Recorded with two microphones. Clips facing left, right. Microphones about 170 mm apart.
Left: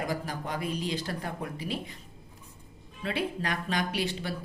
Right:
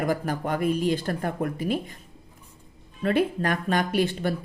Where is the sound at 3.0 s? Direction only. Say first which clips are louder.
Right 8 dB; 50° right (ahead or behind).